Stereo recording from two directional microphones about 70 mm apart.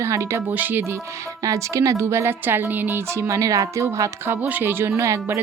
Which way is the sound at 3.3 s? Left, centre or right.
Right.